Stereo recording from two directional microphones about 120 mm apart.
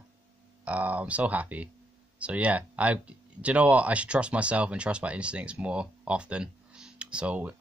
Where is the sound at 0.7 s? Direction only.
10° right (ahead or behind).